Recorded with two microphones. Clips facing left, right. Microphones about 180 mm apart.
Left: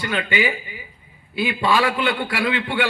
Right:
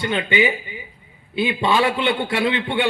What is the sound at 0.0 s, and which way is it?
A man's voice, 20° right (ahead or behind).